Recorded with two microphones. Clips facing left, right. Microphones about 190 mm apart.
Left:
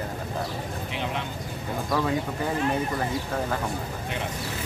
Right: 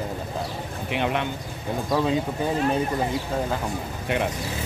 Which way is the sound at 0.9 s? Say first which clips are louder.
Right 8 dB; 65° right (ahead or behind).